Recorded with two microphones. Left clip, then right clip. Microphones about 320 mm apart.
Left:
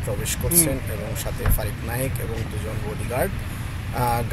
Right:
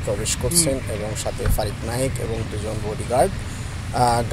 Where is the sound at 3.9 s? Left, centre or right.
Centre.